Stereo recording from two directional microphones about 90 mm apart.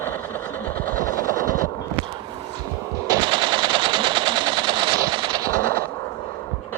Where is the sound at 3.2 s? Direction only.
60° right (ahead or behind).